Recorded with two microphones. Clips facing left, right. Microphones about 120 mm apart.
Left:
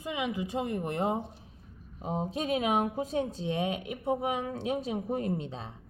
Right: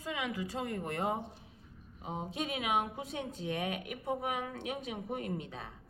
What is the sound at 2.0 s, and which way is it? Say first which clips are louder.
Speech: left 6 dB; 40° left (ahead or behind).